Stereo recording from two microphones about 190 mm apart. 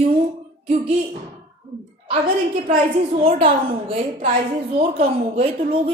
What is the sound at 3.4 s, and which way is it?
Speech, 30° right (ahead or behind).